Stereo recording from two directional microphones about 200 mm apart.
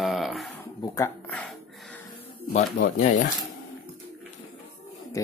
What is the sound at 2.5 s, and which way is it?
Speech, 35° left (ahead or behind).